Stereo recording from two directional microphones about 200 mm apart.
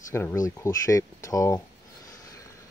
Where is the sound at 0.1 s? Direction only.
10° left (ahead or behind).